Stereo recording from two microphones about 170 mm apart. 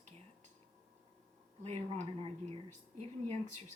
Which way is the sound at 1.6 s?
40° right (ahead or behind).